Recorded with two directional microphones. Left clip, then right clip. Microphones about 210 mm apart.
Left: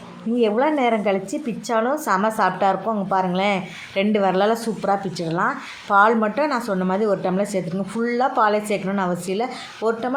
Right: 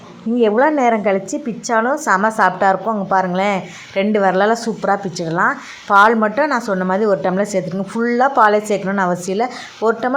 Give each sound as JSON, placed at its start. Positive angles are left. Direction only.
{"t": 0.3, "sound": "a woman's voice", "side_deg": -20}